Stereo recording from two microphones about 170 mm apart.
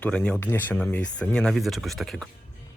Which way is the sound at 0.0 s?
5° left (ahead or behind).